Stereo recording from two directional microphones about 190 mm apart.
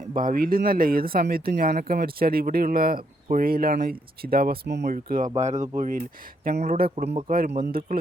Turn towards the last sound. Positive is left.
turn(degrees=-50)  # may be behind; listen again after turning